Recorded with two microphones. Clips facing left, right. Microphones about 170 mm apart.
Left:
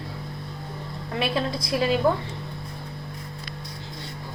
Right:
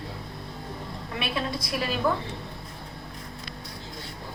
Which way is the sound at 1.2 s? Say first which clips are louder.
Left 5 dB; 30° left (ahead or behind).